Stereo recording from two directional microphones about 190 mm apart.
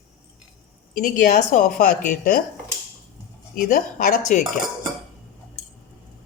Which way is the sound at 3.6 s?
45° left (ahead or behind).